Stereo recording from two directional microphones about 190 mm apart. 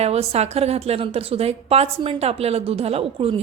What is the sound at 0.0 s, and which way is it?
A woman's voice, 35° right (ahead or behind).